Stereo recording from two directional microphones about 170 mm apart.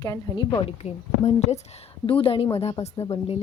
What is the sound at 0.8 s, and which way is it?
Speech, 40° left (ahead or behind).